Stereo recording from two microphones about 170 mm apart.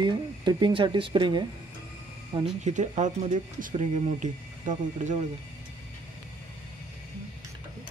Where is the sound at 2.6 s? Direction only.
45° right (ahead or behind).